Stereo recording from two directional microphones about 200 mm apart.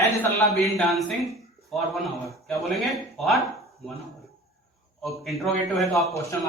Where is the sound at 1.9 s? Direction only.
Centre (ahead or behind).